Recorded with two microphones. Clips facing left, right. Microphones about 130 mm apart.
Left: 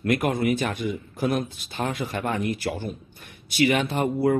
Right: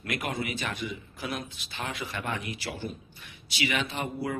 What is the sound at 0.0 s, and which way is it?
A man's voice, 50° left (ahead or behind).